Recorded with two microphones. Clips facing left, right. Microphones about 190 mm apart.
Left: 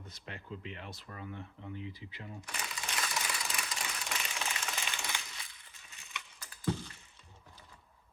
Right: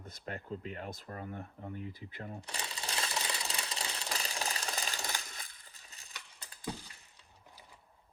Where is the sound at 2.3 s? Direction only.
30° right (ahead or behind).